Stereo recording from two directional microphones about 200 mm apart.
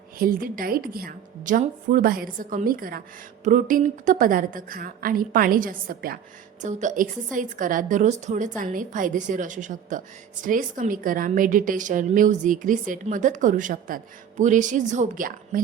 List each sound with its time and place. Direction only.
0.2 s a woman's voice: 45° right (ahead or behind)